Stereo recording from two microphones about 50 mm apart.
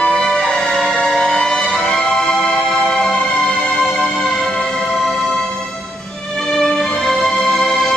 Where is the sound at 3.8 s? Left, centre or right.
Centre.